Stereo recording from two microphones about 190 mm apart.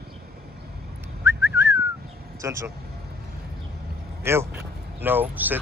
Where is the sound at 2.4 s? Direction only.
15° right (ahead or behind).